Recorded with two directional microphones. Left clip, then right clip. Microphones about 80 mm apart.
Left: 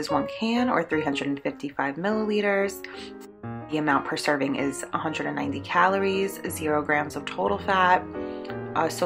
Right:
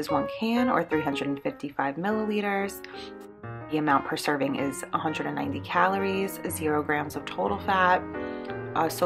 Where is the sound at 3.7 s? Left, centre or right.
Right.